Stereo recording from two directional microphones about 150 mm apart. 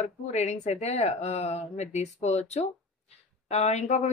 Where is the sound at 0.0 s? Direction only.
50° left (ahead or behind).